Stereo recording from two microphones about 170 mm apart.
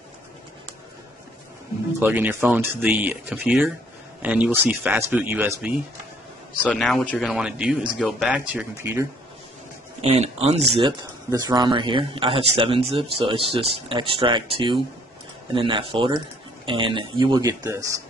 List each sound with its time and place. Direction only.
2.0 s speech: 10° right (ahead or behind)
6.6 s a man's voice: centre (ahead or behind)
10.0 s speech: 40° right (ahead or behind)
10.8 s speech: 25° right (ahead or behind)